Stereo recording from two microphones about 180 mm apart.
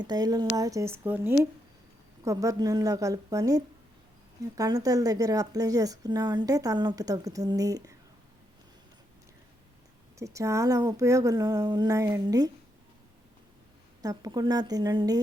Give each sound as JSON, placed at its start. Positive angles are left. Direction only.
{"t": 0.0, "sound": "speech", "side_deg": -20}
{"t": 10.2, "sound": "speech", "side_deg": -15}
{"t": 14.0, "sound": "speech", "side_deg": -20}